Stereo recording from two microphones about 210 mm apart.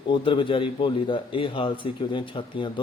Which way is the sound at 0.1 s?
25° left (ahead or behind).